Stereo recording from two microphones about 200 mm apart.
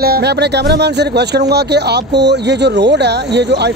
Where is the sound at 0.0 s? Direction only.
55° right (ahead or behind).